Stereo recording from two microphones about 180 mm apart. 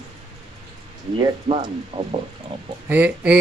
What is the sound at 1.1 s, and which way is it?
A woman's voice, 25° right (ahead or behind).